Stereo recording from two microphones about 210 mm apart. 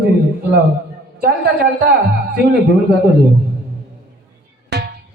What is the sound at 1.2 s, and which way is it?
Speech, 45° right (ahead or behind).